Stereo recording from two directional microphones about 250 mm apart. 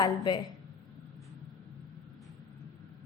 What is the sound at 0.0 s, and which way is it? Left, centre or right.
Speech, centre.